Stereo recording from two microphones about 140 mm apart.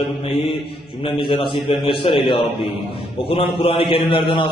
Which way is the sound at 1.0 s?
40° left (ahead or behind).